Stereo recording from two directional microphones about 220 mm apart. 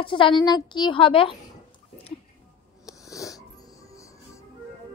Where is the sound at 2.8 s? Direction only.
15° left (ahead or behind).